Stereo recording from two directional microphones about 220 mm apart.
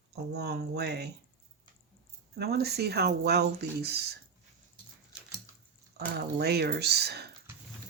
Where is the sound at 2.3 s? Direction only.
45° right (ahead or behind).